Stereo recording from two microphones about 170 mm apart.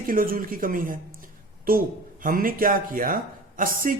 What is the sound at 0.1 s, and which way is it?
A man's voice, 55° right (ahead or behind).